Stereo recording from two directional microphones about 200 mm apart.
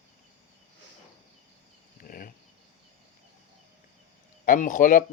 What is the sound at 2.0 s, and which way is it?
Cricket, 45° left (ahead or behind).